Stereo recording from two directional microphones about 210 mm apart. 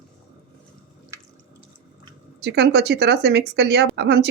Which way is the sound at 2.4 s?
50° right (ahead or behind).